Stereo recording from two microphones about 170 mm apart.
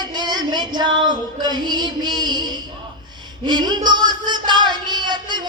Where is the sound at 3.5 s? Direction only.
25° right (ahead or behind).